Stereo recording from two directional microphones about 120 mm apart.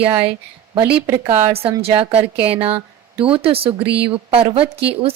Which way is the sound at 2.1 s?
50° right (ahead or behind).